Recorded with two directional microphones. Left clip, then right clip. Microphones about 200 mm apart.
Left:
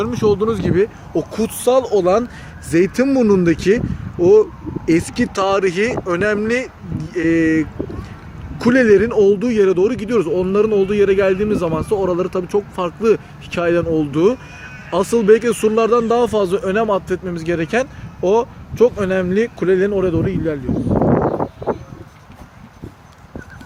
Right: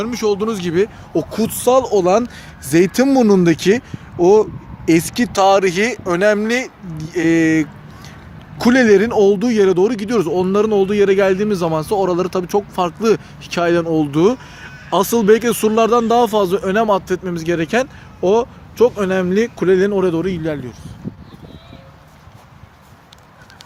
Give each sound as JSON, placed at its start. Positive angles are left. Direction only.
{"t": 0.0, "sound": "a man's voice", "side_deg": -40}